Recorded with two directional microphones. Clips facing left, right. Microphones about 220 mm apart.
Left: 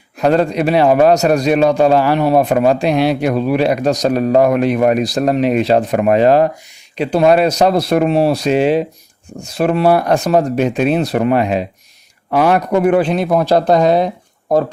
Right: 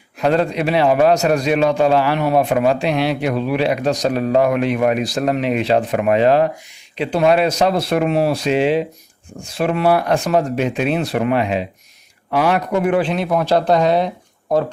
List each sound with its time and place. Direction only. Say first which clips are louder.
0.2 s a man's voice: left 3 dB; 45° left (ahead or behind)